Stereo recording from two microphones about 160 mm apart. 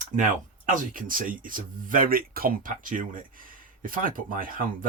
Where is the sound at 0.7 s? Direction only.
55° right (ahead or behind).